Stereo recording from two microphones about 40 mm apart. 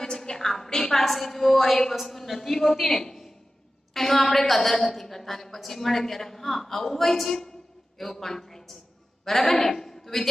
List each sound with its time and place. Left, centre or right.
0.0 s a woman's voice: centre